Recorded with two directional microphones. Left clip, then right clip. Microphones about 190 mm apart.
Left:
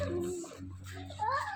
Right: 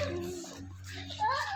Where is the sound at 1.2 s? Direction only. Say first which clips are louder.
Right 3 dB; 30° left (ahead or behind).